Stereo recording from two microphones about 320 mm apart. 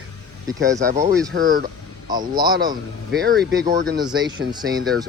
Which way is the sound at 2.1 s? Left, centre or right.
Centre.